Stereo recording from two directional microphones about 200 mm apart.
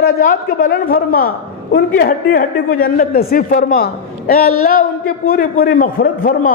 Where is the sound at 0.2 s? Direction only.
45° left (ahead or behind).